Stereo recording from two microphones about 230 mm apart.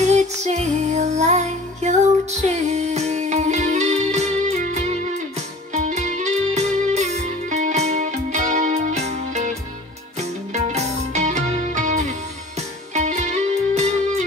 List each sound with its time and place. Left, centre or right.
0.1 s music: right